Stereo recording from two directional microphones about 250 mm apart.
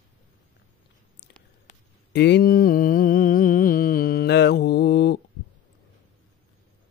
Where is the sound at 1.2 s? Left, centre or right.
Left.